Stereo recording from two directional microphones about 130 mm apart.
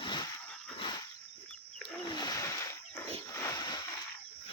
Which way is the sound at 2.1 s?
30° left (ahead or behind).